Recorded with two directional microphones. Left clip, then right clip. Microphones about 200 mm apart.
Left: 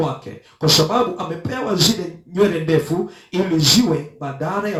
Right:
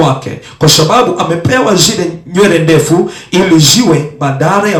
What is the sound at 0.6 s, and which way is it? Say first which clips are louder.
Speech: right 9 dB; 30° right (ahead or behind).